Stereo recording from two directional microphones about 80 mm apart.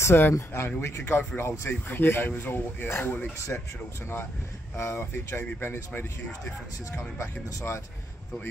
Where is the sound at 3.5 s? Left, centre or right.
Centre.